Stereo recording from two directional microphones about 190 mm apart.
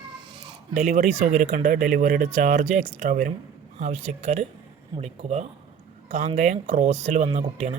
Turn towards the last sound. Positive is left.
turn(degrees=-35)  # may be behind; listen again after turning